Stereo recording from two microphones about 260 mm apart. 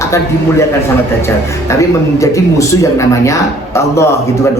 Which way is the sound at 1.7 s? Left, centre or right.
Centre.